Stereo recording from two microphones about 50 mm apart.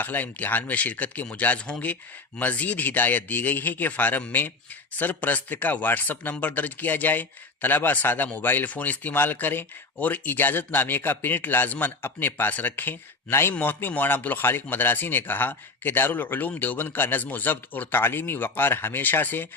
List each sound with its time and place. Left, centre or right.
0.0 s a man's voice: left